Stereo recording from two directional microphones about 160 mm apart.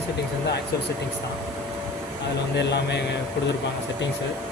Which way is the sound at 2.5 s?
90° left.